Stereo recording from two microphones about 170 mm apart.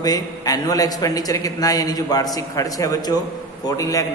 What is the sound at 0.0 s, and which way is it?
A man's voice, 20° left (ahead or behind).